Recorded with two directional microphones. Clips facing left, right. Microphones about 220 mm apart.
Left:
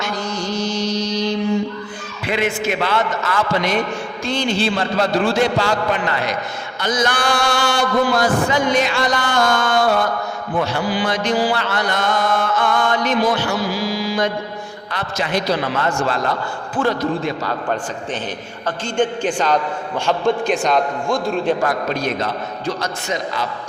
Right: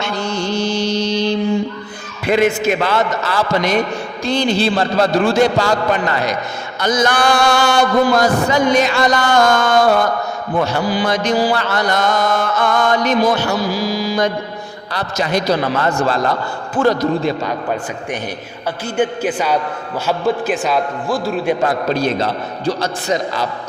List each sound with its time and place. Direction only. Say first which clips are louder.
0.0 s mantra: right 3 dB; 30° right (ahead or behind)
2.2 s mantra: right 6 dB; 45° right (ahead or behind)
6.7 s a sound: right 4 dB; 45° right (ahead or behind)
10.6 s mantra: right 3 dB; 45° right (ahead or behind)
18.9 s a man's voice: right 1 dB; 10° right (ahead or behind)
21.6 s mantra: right 4 dB; 30° right (ahead or behind)